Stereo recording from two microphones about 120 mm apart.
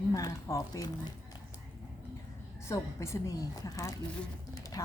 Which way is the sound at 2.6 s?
25° left (ahead or behind).